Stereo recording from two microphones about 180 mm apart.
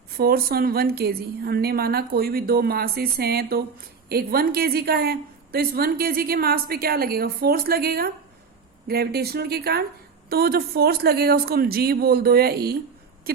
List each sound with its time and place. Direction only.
0.2 s a woman's voice: 55° right (ahead or behind)